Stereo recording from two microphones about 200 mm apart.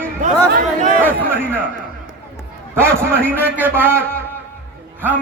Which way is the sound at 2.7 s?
10° right (ahead or behind).